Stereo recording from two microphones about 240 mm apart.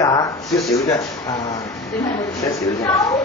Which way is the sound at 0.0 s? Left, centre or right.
Centre.